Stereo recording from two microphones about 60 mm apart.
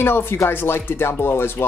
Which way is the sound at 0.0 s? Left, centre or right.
Left.